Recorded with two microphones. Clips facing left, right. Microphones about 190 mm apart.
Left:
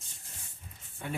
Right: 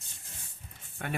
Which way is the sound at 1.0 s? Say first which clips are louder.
Right 1 dB; 70° right (ahead or behind).